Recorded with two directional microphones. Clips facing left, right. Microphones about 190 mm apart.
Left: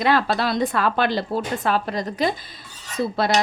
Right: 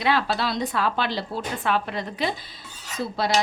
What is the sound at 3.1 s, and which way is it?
Speech, 55° left (ahead or behind).